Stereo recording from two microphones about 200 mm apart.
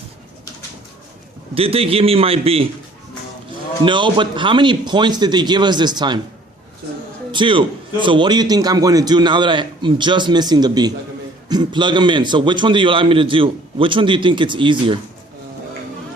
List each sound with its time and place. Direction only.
1.5 s a man's voice: 30° right (ahead or behind)
3.8 s a man's voice: 25° right (ahead or behind)
7.3 s a man's voice: 25° right (ahead or behind)